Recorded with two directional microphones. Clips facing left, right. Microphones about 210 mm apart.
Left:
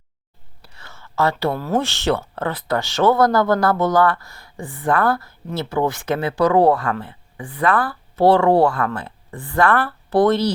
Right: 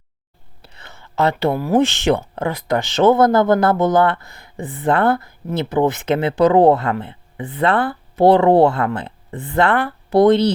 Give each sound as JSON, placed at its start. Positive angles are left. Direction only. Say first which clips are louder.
{"t": 0.6, "sound": "speech", "louder": "right 1 dB", "side_deg": -20}